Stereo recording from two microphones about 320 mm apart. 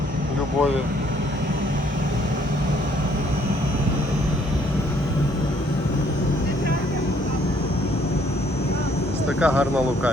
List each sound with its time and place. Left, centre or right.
9.4 s speech: centre